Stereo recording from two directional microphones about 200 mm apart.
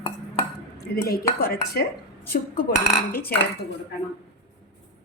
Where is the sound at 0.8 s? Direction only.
50° left (ahead or behind).